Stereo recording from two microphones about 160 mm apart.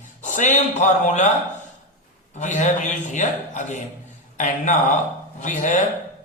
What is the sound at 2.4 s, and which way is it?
Speech, 50° left (ahead or behind).